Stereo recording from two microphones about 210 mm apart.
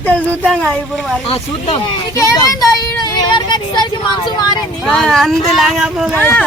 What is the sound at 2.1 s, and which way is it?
Speech, 15° left (ahead or behind).